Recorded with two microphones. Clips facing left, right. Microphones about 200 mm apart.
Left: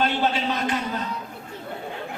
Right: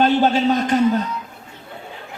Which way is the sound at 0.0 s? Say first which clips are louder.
Right 8 dB; 45° right (ahead or behind).